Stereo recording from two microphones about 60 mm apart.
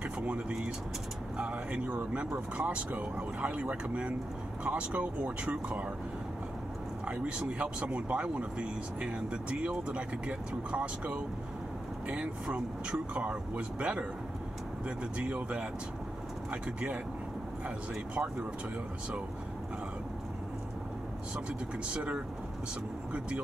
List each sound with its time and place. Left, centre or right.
0.0 s speech: right
7.1 s speech: centre
15.1 s speech: right
21.8 s speech: centre